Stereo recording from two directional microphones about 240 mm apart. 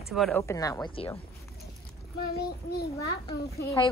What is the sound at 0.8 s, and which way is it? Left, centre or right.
Speech, left.